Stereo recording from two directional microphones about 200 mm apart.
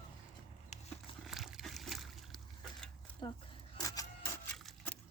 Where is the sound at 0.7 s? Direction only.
35° left (ahead or behind).